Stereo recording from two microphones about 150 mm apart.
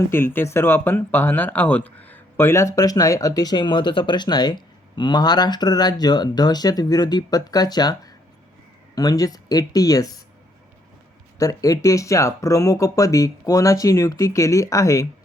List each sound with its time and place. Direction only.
0.1 s speech: 15° left (ahead or behind)
11.3 s speech: 25° left (ahead or behind)